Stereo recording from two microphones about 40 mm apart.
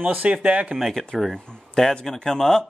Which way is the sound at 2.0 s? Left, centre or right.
Centre.